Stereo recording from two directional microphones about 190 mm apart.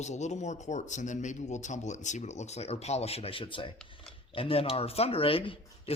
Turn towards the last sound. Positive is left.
turn(degrees=30)  # may be behind; listen again after turning